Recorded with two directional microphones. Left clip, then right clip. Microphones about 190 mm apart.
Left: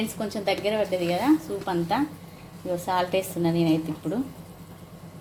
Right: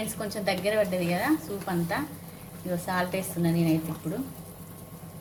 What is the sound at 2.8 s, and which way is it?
Speech, 30° left (ahead or behind).